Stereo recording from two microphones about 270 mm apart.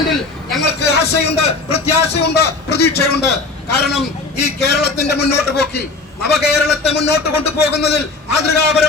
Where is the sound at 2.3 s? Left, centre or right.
Left.